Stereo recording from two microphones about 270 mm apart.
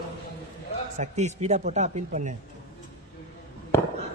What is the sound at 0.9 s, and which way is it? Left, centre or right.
Speech, right.